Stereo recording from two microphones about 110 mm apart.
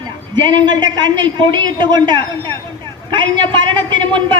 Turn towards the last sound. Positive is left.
turn(degrees=-45)  # may be behind; listen again after turning